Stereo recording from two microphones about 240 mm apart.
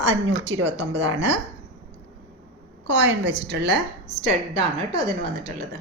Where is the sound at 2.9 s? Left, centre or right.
Right.